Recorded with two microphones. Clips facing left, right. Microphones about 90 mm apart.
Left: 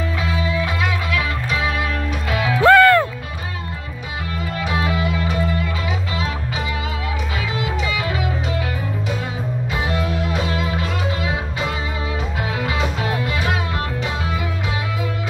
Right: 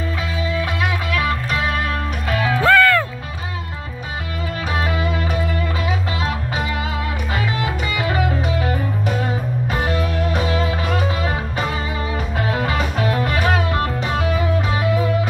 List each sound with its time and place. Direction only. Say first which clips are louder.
1.1 s music: right 2 dB; 40° right (ahead or behind)
2.6 s music: left 4 dB; 25° left (ahead or behind)
4.7 s music: even; 35° right (ahead or behind)
7.5 s music: even; 45° right (ahead or behind)